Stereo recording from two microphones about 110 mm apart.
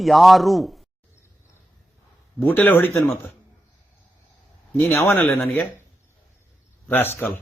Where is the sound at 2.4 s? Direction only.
20° left (ahead or behind).